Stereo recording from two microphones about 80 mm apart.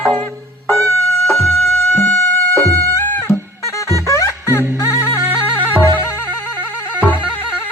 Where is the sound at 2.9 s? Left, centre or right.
Left.